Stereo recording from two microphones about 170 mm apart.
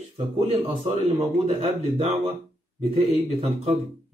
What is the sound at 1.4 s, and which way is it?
Speech, 40° right (ahead or behind).